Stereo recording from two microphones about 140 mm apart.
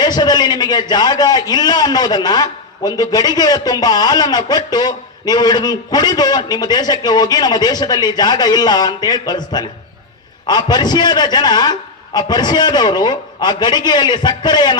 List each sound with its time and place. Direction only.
0.0 s a man's voice: 30° left (ahead or behind)